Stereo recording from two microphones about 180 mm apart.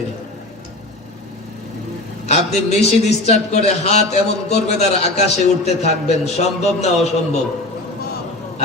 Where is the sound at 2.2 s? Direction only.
40° left (ahead or behind).